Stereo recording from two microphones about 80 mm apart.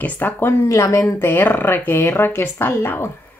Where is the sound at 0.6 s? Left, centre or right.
Left.